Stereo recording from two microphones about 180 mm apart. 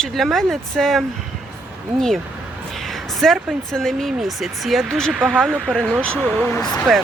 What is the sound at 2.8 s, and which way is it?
Speech, centre (ahead or behind).